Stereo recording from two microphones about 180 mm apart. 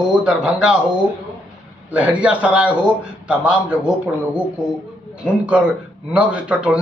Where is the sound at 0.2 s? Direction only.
5° right (ahead or behind).